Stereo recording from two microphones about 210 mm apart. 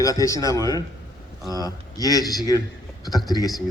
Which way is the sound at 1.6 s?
15° left (ahead or behind).